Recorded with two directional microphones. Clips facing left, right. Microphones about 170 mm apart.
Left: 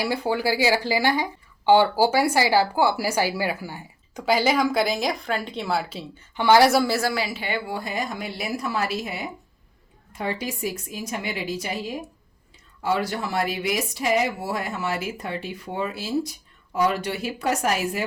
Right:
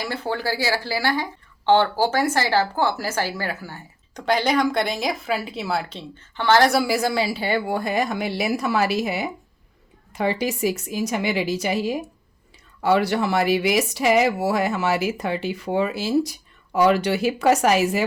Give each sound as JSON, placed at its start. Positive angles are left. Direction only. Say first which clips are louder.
{"t": 0.0, "sound": "speech", "louder": "left 2 dB", "side_deg": 10}
{"t": 6.7, "sound": "a woman's voice", "louder": "right 1 dB", "side_deg": -15}
{"t": 7.1, "sound": "a woman's voice", "louder": "right 5 dB", "side_deg": -30}
{"t": 7.7, "sound": "speech", "louder": "right 6 dB", "side_deg": -60}
{"t": 12.8, "sound": "speech", "louder": "right 6 dB", "side_deg": -70}